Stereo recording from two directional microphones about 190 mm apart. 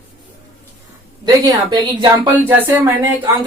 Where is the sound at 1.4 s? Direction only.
20° right (ahead or behind).